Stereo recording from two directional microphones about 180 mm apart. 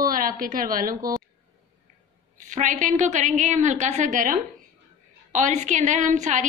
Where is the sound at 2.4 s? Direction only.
45° right (ahead or behind).